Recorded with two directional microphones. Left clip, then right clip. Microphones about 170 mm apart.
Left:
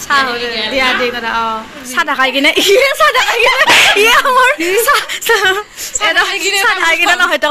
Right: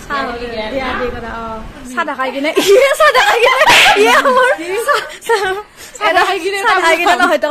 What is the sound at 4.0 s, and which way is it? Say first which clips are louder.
A woman's voice: left 1 dB; 10° left (ahead or behind).